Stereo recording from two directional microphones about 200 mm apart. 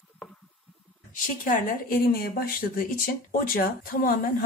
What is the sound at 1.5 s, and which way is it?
Speech, 45° left (ahead or behind).